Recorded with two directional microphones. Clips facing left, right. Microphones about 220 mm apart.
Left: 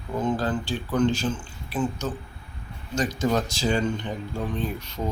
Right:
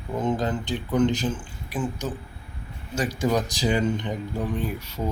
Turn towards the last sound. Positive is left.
turn(degrees=-10)  # may be behind; listen again after turning